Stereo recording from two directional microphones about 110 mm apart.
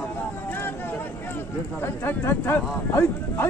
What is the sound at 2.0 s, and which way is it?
Speech, 20° left (ahead or behind).